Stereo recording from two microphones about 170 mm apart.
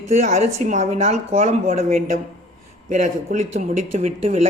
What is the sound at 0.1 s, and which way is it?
Speech, 45° right (ahead or behind).